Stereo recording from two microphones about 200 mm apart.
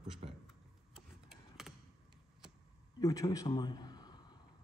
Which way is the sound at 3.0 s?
20° left (ahead or behind).